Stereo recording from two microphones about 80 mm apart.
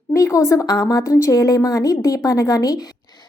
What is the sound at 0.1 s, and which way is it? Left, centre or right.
A woman's voice, left.